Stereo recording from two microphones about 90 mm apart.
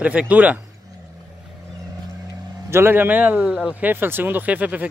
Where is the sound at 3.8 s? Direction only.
25° right (ahead or behind).